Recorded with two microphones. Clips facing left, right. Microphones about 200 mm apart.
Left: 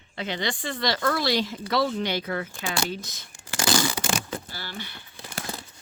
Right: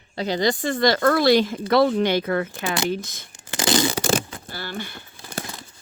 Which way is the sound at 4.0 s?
40° right (ahead or behind).